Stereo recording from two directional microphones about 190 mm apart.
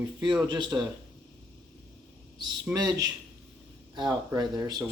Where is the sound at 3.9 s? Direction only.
20° right (ahead or behind).